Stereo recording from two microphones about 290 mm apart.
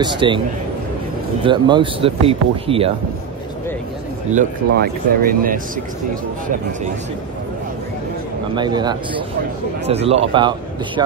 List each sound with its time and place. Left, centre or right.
0.0 s speech: centre
1.4 s speech: centre
4.3 s speech: right
8.5 s speech: centre